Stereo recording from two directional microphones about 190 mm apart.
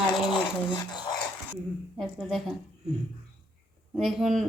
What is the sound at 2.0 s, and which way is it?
Speech, centre (ahead or behind).